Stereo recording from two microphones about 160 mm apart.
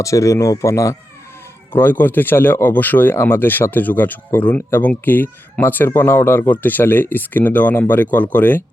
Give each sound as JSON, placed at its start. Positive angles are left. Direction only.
{"t": 0.0, "sound": "speech", "side_deg": 20}